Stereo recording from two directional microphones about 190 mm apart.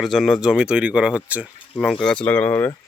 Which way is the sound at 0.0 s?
Centre (ahead or behind).